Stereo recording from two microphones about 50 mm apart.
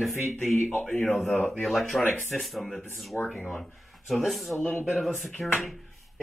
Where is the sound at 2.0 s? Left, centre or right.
Left.